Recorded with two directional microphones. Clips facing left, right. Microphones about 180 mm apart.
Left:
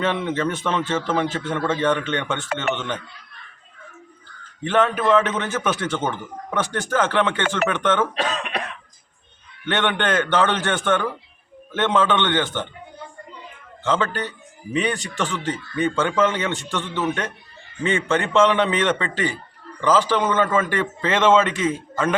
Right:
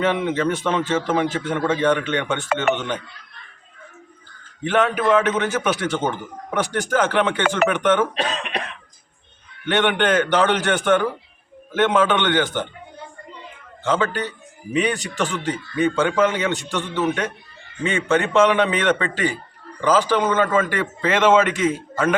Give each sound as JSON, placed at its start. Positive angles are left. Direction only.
{"t": 0.0, "sound": "a man's voice", "side_deg": -15}
{"t": 4.6, "sound": "a man's voice", "side_deg": -15}
{"t": 9.6, "sound": "a man's voice", "side_deg": -15}
{"t": 13.8, "sound": "a man's voice", "side_deg": -15}